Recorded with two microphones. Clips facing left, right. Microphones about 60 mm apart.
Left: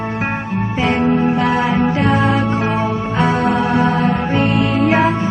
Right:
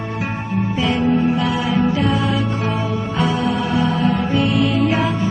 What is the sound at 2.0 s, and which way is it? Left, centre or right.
Music, left.